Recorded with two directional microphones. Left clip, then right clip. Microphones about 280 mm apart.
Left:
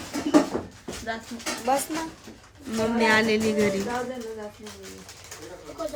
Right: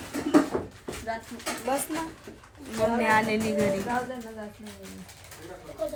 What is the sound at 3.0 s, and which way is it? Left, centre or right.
Speech, centre.